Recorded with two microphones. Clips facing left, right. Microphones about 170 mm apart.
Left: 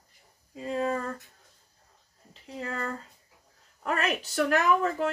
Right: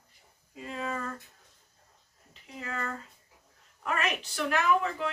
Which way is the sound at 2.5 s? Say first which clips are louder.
Left 3 dB; 35° left (ahead or behind).